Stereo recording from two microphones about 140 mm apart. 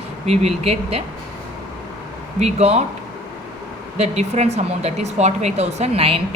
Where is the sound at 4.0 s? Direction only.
50° right (ahead or behind).